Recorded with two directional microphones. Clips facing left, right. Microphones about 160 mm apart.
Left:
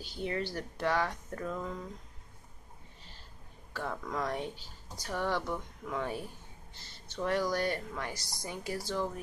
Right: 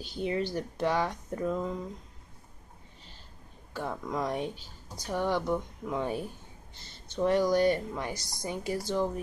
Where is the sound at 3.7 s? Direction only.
15° right (ahead or behind).